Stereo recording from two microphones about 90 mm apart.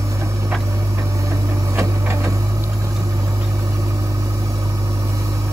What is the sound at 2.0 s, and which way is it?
Printer, 30° right (ahead or behind).